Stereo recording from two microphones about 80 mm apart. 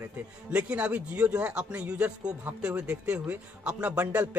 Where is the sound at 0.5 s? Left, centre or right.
Centre.